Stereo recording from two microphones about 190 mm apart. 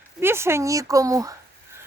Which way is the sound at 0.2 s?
15° right (ahead or behind).